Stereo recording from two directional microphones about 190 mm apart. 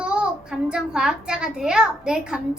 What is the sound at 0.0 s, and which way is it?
A child's voice, 5° right (ahead or behind).